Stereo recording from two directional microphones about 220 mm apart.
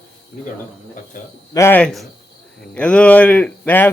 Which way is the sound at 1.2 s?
35° left (ahead or behind).